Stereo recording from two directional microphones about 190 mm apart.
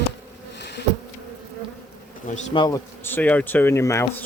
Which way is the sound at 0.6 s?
65° left (ahead or behind).